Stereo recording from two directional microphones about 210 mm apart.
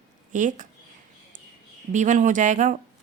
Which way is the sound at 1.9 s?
35° right (ahead or behind).